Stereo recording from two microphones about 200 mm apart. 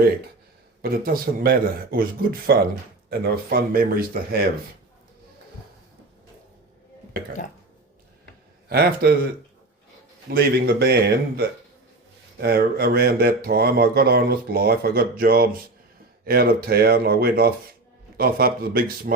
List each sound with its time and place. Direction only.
0.8 s speech: 50° right (ahead or behind)
8.7 s speech: 50° right (ahead or behind)
10.3 s speech: 50° right (ahead or behind)